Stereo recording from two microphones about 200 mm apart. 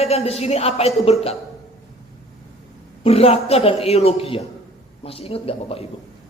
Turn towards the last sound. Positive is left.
turn(degrees=30)  # may be behind; listen again after turning